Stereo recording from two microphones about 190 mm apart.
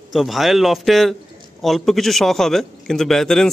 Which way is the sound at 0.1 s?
Centre (ahead or behind).